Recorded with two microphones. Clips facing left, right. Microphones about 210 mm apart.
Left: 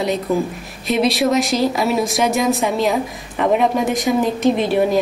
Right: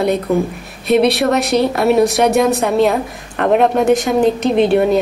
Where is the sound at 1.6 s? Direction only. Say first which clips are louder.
Right 4 dB; 60° right (ahead or behind).